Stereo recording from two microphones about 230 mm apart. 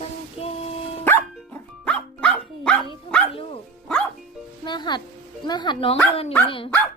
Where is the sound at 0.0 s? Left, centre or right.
Left.